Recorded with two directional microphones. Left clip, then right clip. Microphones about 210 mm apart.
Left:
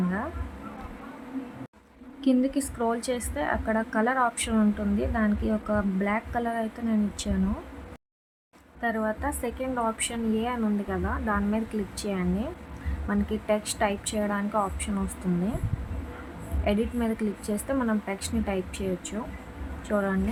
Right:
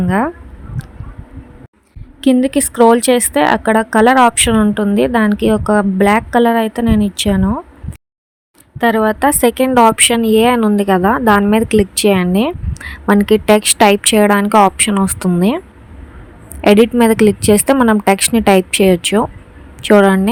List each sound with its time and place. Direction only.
2.2 s a woman's voice: 40° right (ahead or behind)
8.8 s a woman's voice: 45° right (ahead or behind)
16.6 s a woman's voice: 50° right (ahead or behind)